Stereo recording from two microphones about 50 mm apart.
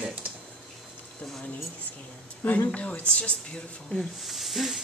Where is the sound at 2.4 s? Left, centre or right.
Left.